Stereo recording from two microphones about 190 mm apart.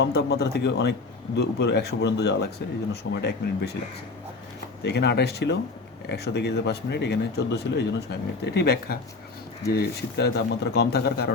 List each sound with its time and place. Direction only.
0.0 s speech: 60° left (ahead or behind)
4.8 s speech: 60° left (ahead or behind)